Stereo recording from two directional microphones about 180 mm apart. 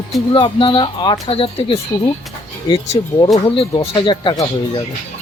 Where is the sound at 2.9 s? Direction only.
25° left (ahead or behind).